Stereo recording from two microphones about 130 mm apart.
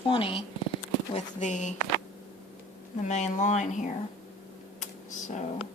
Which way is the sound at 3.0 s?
65° left (ahead or behind).